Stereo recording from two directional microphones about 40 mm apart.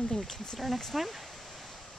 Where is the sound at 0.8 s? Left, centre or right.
Centre.